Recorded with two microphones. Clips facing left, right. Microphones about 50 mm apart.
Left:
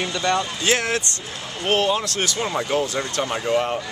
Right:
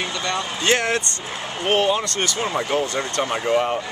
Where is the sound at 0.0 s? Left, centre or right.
Centre.